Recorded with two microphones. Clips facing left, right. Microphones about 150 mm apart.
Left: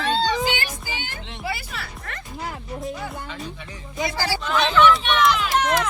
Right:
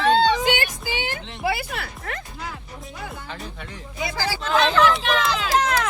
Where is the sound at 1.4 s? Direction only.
70° right (ahead or behind).